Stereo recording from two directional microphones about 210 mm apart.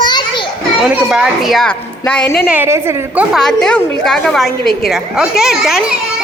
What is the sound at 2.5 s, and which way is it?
Speech, 10° right (ahead or behind).